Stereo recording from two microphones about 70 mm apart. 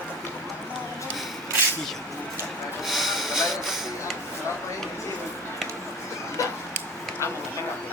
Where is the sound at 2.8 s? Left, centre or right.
Centre.